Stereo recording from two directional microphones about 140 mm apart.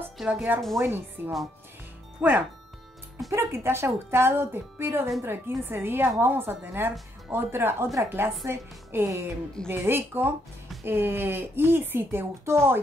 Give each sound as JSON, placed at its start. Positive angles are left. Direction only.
{"t": 0.2, "sound": "speech", "side_deg": -5}
{"t": 0.7, "sound": "a woman's voice", "side_deg": -15}